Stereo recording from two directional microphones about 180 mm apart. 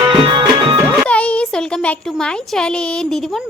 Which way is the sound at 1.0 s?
5° left (ahead or behind).